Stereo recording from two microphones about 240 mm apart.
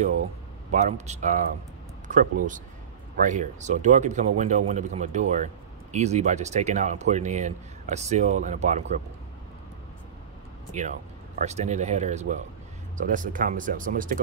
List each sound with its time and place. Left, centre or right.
0.7 s speech: right
10.8 s speech: right